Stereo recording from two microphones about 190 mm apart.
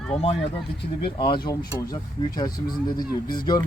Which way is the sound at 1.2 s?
25° left (ahead or behind).